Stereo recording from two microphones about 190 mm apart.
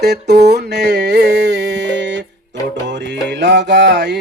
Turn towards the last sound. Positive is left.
turn(degrees=-65)  # may be behind; listen again after turning